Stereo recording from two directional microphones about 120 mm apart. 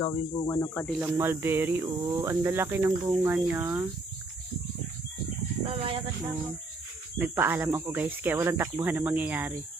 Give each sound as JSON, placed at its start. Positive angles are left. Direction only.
{"t": 0.0, "sound": "speech", "side_deg": 20}
{"t": 1.1, "sound": "speech", "side_deg": -20}
{"t": 5.6, "sound": "speech", "side_deg": -50}
{"t": 7.2, "sound": "speech", "side_deg": -20}